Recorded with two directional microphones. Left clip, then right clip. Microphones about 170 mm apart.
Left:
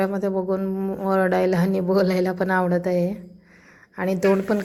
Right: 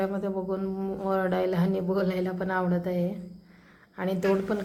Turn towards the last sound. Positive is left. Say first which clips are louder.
# left 6 dB
turn(degrees=25)  # may be behind; listen again after turning